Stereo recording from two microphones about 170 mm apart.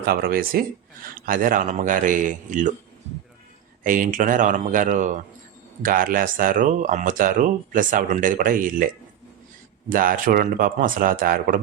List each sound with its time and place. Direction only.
0.0 s speech: 60° right (ahead or behind)
3.8 s speech: 50° right (ahead or behind)
9.9 s speech: 55° right (ahead or behind)